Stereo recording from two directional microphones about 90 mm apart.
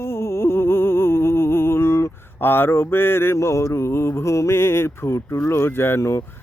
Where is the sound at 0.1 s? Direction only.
30° left (ahead or behind).